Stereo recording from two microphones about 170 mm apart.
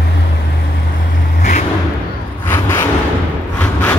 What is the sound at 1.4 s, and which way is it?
Vehicle, 45° left (ahead or behind).